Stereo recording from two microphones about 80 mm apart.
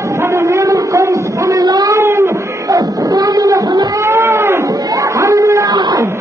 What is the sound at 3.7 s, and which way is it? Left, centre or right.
Speech, right.